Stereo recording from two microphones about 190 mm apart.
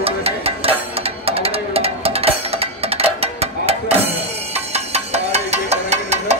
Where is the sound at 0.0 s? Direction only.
30° right (ahead or behind).